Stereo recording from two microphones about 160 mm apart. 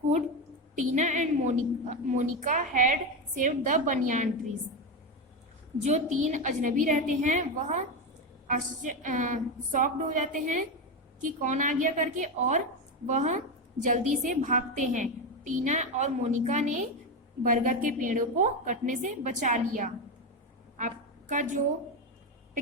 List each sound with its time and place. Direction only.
0.8 s a woman's voice: 50° right (ahead or behind)
5.8 s a woman's voice: 50° right (ahead or behind)